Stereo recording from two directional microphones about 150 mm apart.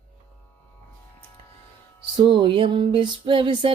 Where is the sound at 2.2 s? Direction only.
35° right (ahead or behind).